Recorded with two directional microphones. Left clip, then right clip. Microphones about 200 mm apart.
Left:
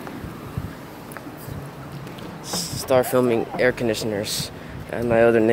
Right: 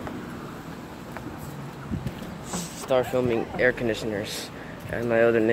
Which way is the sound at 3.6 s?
20° left (ahead or behind).